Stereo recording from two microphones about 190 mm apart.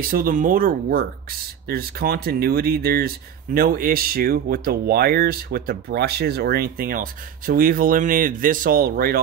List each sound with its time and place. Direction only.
0.0 s speech: 50° right (ahead or behind)